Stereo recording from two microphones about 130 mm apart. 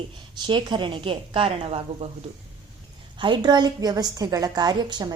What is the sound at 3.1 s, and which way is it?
A woman's voice, 35° right (ahead or behind).